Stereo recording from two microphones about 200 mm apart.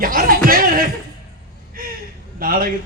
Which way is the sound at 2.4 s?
45° right (ahead or behind).